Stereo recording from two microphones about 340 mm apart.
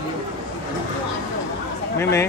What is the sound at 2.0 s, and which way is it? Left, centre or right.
Speech, centre.